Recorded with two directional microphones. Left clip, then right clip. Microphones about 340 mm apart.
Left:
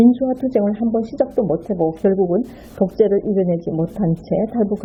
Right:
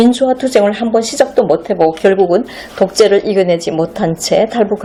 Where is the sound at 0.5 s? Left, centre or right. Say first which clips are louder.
Right 8 dB; centre.